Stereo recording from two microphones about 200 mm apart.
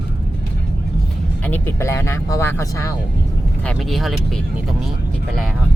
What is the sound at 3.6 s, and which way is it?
Speech, centre (ahead or behind).